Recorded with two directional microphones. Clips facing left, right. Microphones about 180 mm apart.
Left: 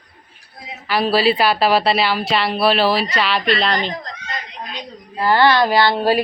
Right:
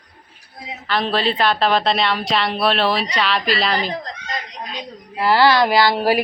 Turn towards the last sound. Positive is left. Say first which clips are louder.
# left 1 dB
turn(degrees=-10)  # may be behind; listen again after turning